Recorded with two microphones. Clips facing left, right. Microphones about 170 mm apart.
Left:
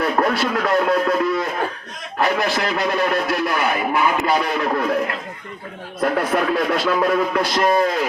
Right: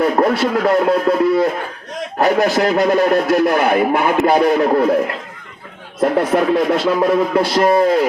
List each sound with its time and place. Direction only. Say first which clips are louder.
0.0 s speech: right 5 dB; 25° right (ahead or behind)
6.0 s speech: right 5 dB; 25° right (ahead or behind)